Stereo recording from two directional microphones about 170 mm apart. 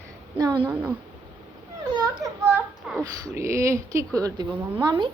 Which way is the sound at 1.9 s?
20° right (ahead or behind).